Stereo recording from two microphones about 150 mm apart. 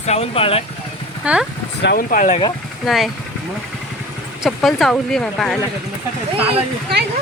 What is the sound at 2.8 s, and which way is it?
Speech, centre (ahead or behind).